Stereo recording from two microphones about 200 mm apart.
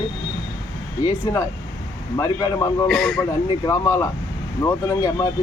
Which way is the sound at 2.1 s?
15° left (ahead or behind).